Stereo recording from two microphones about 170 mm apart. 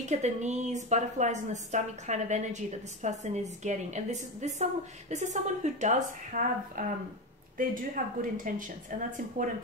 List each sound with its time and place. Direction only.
0.0 s a woman's voice: 45° right (ahead or behind)